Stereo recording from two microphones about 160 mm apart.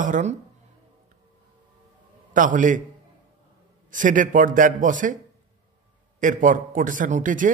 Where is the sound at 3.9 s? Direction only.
55° right (ahead or behind).